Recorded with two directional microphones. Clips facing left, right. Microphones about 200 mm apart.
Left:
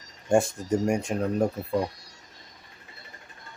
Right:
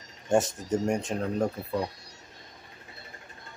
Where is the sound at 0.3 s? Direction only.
10° left (ahead or behind).